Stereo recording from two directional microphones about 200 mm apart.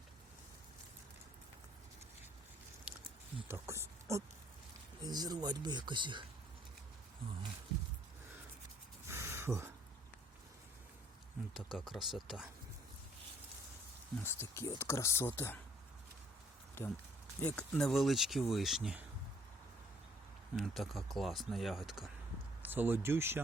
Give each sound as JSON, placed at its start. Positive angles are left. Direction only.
{"t": 3.5, "sound": "speech", "side_deg": -15}
{"t": 5.0, "sound": "speech", "side_deg": -20}
{"t": 9.0, "sound": "a sound", "side_deg": -10}
{"t": 11.5, "sound": "speech", "side_deg": 0}
{"t": 14.3, "sound": "speech", "side_deg": 10}
{"t": 16.8, "sound": "speech", "side_deg": 10}
{"t": 20.6, "sound": "speech", "side_deg": 0}